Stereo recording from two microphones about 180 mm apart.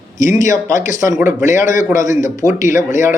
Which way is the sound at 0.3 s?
45° left (ahead or behind).